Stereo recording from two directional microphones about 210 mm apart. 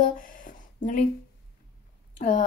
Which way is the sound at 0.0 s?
40° left (ahead or behind).